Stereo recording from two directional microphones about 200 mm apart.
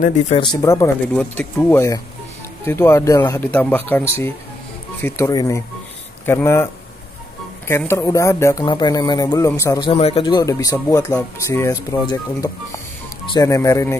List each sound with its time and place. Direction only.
0.4 s speech: 20° left (ahead or behind)